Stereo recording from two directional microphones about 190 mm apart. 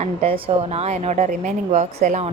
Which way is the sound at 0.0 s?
35° right (ahead or behind).